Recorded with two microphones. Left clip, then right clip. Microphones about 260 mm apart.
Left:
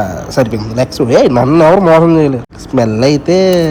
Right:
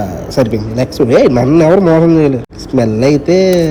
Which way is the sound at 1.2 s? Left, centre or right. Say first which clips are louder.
Left 1 dB; left.